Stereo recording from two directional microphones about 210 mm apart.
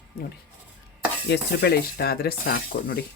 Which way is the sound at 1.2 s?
50° left (ahead or behind).